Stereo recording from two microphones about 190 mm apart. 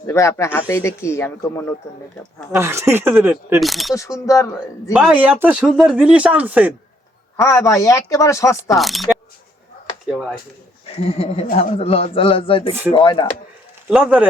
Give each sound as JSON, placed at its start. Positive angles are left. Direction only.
{"t": 0.1, "sound": "speech", "side_deg": 15}
{"t": 2.5, "sound": "speech", "side_deg": -15}
{"t": 3.6, "sound": "speech", "side_deg": 0}
{"t": 3.9, "sound": "speech", "side_deg": 15}
{"t": 4.9, "sound": "speech", "side_deg": -5}
{"t": 7.3, "sound": "speech", "side_deg": 15}
{"t": 8.7, "sound": "speech", "side_deg": 0}
{"t": 10.9, "sound": "a man's voice", "side_deg": 30}
{"t": 13.9, "sound": "speech", "side_deg": -5}